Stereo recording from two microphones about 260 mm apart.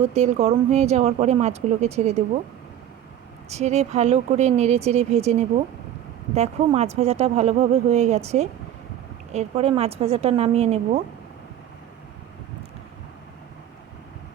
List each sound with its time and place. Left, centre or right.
0.1 s speech: right
3.5 s speech: right